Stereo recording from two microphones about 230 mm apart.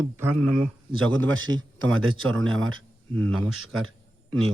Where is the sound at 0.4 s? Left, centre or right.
Centre.